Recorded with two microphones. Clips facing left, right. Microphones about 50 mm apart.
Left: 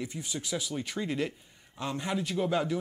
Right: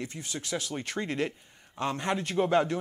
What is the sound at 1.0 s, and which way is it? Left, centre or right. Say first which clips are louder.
Speech: right 1 dB; centre.